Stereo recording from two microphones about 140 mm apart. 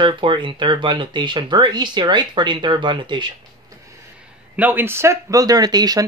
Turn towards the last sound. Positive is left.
turn(degrees=-30)  # may be behind; listen again after turning